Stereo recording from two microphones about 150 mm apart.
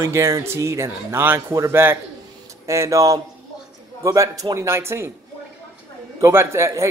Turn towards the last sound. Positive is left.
turn(degrees=-20)  # may be behind; listen again after turning